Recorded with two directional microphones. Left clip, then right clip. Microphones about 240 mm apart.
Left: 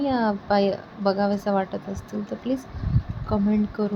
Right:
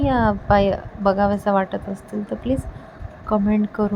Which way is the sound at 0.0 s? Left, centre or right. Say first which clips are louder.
Right 5 dB; centre.